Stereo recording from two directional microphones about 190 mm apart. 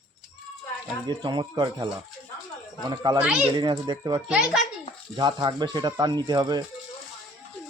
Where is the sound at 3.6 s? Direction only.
20° right (ahead or behind).